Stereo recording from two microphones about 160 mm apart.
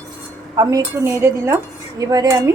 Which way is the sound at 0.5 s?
20° right (ahead or behind).